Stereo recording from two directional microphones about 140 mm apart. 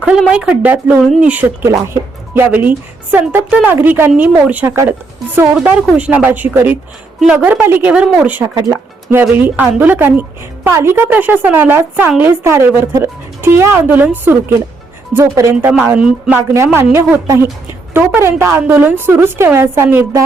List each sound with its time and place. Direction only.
0.3 s speech: 10° right (ahead or behind)
15.8 s speech: 5° right (ahead or behind)